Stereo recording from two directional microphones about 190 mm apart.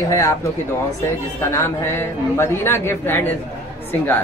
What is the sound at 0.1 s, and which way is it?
Speech, 15° left (ahead or behind).